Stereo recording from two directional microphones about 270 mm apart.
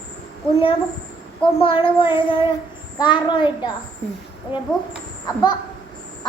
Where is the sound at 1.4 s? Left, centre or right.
Centre.